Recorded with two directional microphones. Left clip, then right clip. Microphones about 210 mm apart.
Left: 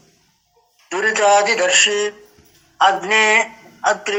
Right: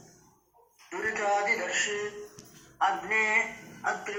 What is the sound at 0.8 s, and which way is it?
Mantra, 40° left (ahead or behind).